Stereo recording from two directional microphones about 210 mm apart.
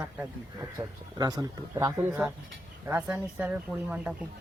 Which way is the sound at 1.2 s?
15° right (ahead or behind).